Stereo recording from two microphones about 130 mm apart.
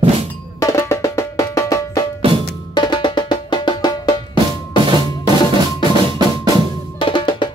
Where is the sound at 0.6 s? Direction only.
25° left (ahead or behind).